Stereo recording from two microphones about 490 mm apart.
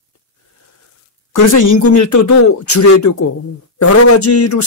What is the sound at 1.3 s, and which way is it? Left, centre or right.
A man's voice, left.